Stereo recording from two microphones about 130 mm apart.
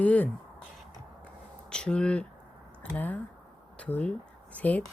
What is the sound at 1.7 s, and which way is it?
Speech, 5° left (ahead or behind).